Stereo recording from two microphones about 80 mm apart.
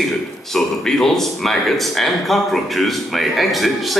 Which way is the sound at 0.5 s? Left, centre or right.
Centre.